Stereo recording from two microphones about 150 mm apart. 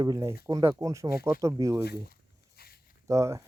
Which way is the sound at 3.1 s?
20° right (ahead or behind).